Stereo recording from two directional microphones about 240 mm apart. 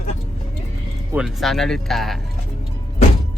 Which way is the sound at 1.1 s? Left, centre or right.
Centre.